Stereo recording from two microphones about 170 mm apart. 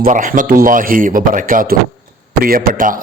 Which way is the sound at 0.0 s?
50° right (ahead or behind).